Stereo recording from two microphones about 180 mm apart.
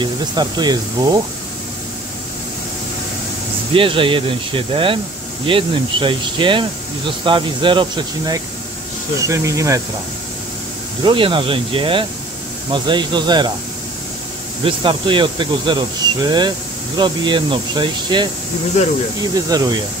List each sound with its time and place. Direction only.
0.0 s speech: 25° right (ahead or behind)
3.7 s speech: 30° right (ahead or behind)
11.1 s speech: 30° right (ahead or behind)
14.6 s speech: 25° right (ahead or behind)
19.3 s speech: 20° right (ahead or behind)